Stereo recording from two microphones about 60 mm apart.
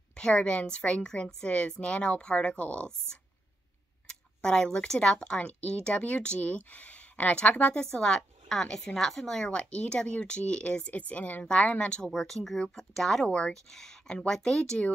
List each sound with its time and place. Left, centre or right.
0.1 s a woman's voice: centre
4.4 s a woman's voice: centre
7.8 s a woman's voice: centre
12.1 s a woman's voice: centre